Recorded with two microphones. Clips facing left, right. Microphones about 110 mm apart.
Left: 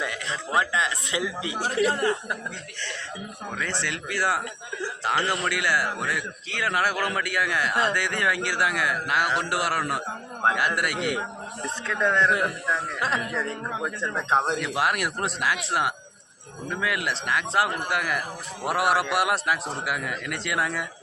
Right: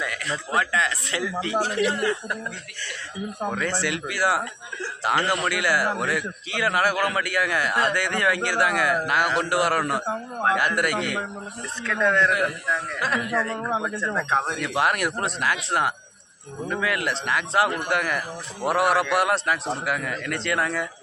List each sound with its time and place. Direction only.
0.0 s a man's voice: 20° left (ahead or behind)
1.9 s speech: 40° left (ahead or behind)
3.6 s a man's voice: 5° right (ahead or behind)
11.6 s a man's voice: 20° left (ahead or behind)
14.6 s a man's voice: centre (ahead or behind)